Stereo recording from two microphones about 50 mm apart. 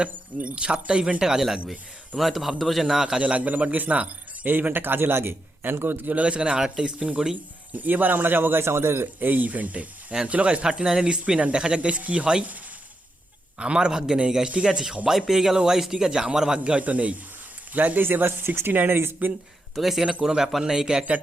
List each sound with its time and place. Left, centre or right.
0.4 s speech: right
1.2 s a man's voice: centre
2.1 s a man's voice: centre
2.8 s a man's voice: centre
3.2 s a man's voice: right
6.2 s speech: right
7.7 s a man's voice: right
13.6 s a man's voice: centre
16.7 s speech: right
19.7 s a man's voice: centre